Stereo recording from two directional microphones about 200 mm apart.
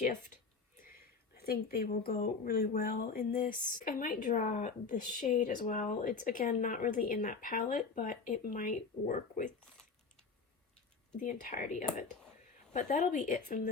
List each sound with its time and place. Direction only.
0.0 s speech: 40° left (ahead or behind)
0.8 s a sound: 50° left (ahead or behind)
2.2 s speech: 45° left (ahead or behind)
11.1 s speech: 40° left (ahead or behind)